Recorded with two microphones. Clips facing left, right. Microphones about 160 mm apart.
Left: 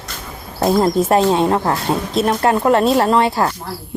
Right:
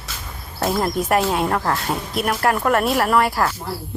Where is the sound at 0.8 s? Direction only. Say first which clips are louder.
Left 5 dB; 25° left (ahead or behind).